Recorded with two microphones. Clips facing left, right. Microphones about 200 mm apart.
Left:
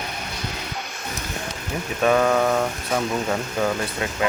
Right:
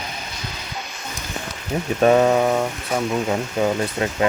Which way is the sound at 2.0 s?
25° right (ahead or behind).